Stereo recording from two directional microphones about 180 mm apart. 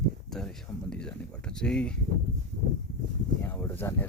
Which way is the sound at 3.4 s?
10° left (ahead or behind).